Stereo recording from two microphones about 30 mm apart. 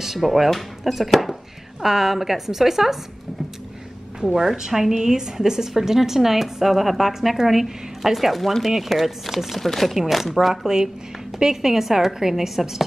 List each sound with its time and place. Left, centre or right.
0.2 s a woman's voice: centre
4.4 s a woman's voice: centre
7.2 s a woman's voice: centre
9.6 s a woman's voice: centre